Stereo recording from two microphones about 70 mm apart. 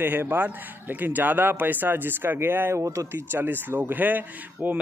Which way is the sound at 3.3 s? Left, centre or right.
Right.